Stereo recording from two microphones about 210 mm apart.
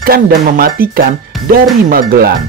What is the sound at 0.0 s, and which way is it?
Speech, 45° right (ahead or behind).